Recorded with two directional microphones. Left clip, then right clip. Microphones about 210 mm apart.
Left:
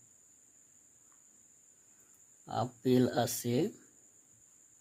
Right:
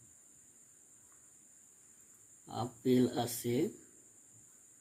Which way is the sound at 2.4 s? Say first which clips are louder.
Left 2 dB; 50° left (ahead or behind).